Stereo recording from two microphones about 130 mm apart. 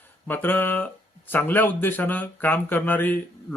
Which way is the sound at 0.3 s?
15° left (ahead or behind).